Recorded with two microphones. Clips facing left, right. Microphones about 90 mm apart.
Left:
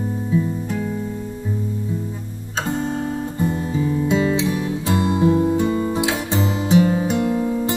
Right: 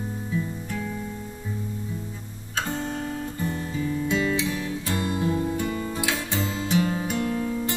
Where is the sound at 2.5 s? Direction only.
25° left (ahead or behind).